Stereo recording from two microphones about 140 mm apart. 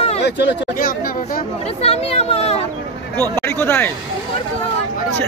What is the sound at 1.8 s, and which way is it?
Speech, 45° left (ahead or behind).